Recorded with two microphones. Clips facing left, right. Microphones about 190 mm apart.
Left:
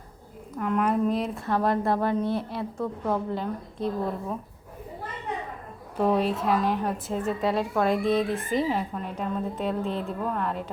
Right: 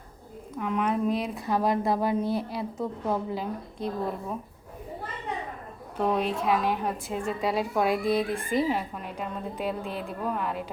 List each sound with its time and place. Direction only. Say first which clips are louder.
0.5 s a woman's voice: left 2 dB; centre (ahead or behind)
2.7 s a woman's voice: left 1 dB; 20° right (ahead or behind)
3.1 s a woman's voice: left 2 dB; 5° right (ahead or behind)
6.0 s a woman's voice: left 3 dB; 5° left (ahead or behind)